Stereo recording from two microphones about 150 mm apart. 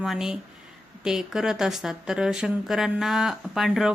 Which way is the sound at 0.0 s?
5° right (ahead or behind).